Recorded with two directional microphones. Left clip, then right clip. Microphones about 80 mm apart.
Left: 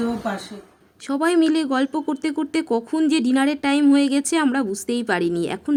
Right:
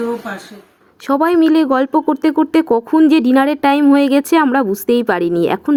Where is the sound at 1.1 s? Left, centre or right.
Right.